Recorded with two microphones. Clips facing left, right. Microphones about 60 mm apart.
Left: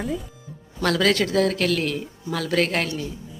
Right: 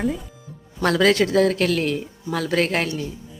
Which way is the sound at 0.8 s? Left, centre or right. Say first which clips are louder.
Right 3 dB; centre.